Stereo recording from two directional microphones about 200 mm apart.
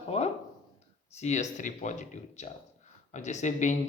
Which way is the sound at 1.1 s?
35° left (ahead or behind).